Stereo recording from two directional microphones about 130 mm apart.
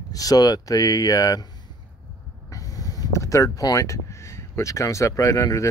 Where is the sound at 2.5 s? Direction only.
25° left (ahead or behind).